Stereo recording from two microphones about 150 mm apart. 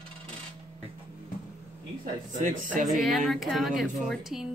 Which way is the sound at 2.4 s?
60° right (ahead or behind).